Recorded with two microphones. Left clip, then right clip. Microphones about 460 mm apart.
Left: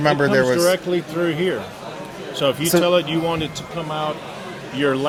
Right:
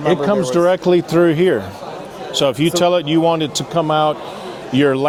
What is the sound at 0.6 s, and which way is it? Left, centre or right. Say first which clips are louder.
Speech: right 5 dB; right.